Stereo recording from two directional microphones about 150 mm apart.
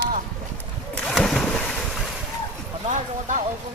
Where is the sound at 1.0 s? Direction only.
Centre (ahead or behind).